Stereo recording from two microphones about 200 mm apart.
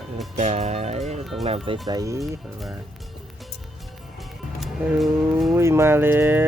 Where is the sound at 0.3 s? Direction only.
35° right (ahead or behind).